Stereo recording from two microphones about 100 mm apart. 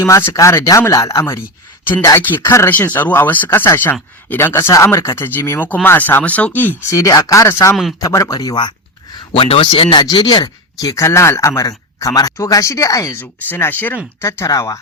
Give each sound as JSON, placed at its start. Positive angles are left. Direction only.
{"t": 0.0, "sound": "speech", "side_deg": 25}
{"t": 6.9, "sound": "speech", "side_deg": 35}
{"t": 9.3, "sound": "speech", "side_deg": 75}
{"t": 10.0, "sound": "speech", "side_deg": 45}
{"t": 13.5, "sound": "speech", "side_deg": 20}